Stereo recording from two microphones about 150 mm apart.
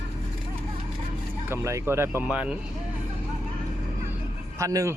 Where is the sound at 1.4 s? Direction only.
15° right (ahead or behind).